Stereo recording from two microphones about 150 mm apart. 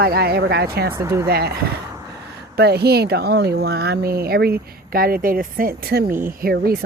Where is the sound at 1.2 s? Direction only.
90° right.